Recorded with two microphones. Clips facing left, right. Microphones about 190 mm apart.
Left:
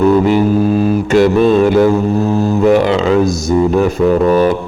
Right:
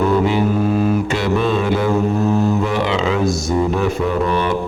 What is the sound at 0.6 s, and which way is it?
Mantra, 30° left (ahead or behind).